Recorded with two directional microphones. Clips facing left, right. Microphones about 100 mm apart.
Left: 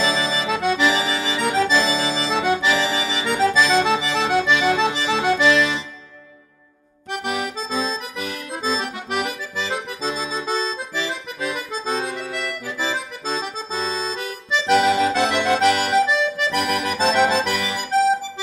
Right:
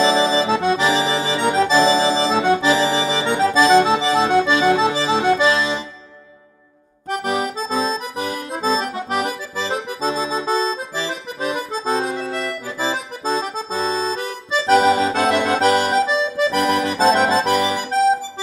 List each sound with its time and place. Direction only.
0.0 s accordion: 30° right (ahead or behind)
7.1 s accordion: 35° right (ahead or behind)
13.4 s accordion: 40° right (ahead or behind)